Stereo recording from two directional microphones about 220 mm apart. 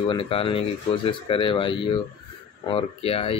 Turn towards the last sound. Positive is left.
turn(degrees=25)  # may be behind; listen again after turning